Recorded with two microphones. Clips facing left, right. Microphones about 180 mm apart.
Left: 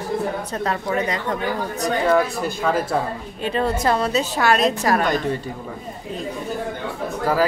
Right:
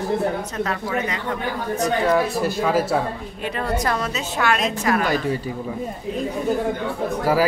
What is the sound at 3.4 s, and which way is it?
A woman's voice, 30° left (ahead or behind).